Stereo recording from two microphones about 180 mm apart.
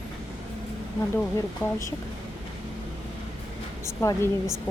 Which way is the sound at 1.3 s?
15° left (ahead or behind).